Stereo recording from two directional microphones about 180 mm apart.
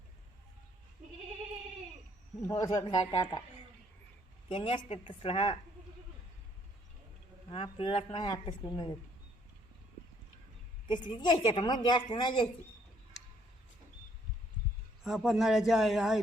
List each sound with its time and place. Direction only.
2.5 s a woman's voice: 20° left (ahead or behind)
4.4 s a woman's voice: 30° left (ahead or behind)
7.5 s a woman's voice: 30° left (ahead or behind)
10.8 s a woman's voice: 25° left (ahead or behind)
15.0 s a man's voice: 5° right (ahead or behind)